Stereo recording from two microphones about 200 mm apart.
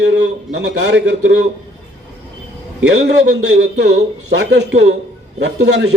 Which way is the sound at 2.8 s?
60° right (ahead or behind).